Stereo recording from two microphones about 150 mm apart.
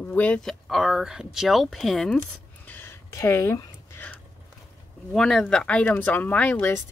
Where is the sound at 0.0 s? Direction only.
10° left (ahead or behind).